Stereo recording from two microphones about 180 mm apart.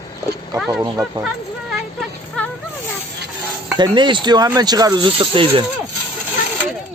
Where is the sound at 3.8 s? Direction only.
25° right (ahead or behind).